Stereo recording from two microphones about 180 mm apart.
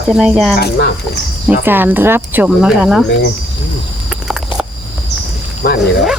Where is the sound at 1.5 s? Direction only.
10° right (ahead or behind).